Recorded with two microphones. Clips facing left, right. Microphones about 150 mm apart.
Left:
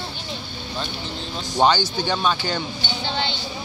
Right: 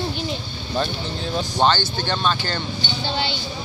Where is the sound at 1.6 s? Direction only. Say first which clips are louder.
Left 2 dB; 10° left (ahead or behind).